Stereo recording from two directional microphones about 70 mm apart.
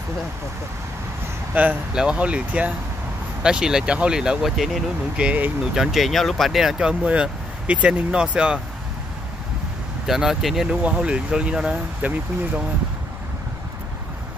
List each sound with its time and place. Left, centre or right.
1.5 s speech: right; by 4.8 s centre
5.1 s speech: centre
5.8 s speech: centre
10.0 s speech: centre
10.8 s speech: centre